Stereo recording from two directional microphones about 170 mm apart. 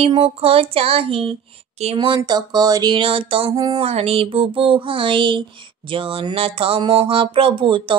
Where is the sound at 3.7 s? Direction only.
35° right (ahead or behind).